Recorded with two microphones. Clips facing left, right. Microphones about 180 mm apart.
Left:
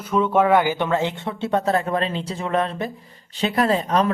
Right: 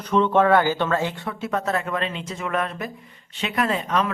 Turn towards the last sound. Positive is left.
turn(degrees=35)  # may be behind; listen again after turning